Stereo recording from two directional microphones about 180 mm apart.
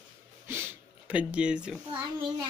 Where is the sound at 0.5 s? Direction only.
10° right (ahead or behind).